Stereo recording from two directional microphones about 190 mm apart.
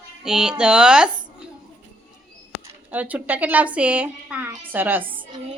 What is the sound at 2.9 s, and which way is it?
Speech, 10° right (ahead or behind).